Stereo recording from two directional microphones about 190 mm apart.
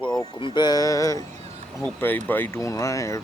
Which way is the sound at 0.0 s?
25° left (ahead or behind).